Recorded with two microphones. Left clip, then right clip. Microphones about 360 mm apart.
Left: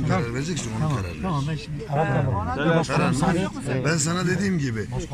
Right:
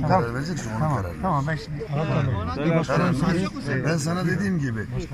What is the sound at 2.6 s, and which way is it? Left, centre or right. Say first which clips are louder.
Speech: even; left.